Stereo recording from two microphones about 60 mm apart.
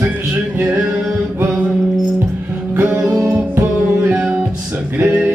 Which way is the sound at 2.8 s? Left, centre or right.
Right.